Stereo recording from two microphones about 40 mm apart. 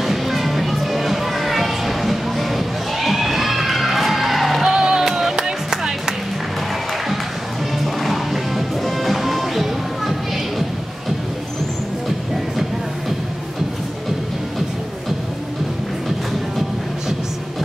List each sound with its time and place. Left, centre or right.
0.0 s music: centre
4.6 s music: centre
7.8 s music: centre